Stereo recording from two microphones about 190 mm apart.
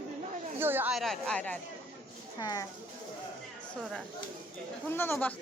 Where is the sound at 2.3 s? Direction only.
20° left (ahead or behind).